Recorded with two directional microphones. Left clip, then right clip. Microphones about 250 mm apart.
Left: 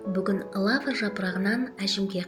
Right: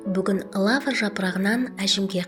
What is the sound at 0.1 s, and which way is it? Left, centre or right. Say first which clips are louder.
A woman's voice: right 3 dB; right.